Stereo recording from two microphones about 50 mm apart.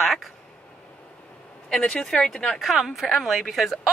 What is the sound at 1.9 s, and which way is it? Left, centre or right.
Speech, centre.